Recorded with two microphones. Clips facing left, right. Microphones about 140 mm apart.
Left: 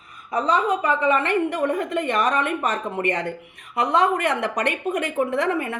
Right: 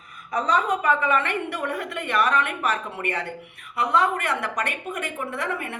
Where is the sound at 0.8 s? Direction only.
35° left (ahead or behind).